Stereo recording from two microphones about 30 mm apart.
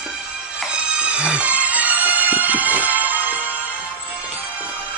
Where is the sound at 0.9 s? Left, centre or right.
Right.